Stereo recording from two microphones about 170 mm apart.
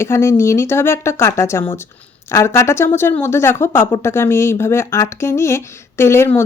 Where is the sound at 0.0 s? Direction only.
15° left (ahead or behind).